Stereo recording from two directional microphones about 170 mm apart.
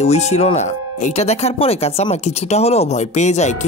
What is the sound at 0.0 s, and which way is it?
Speech, 40° left (ahead or behind).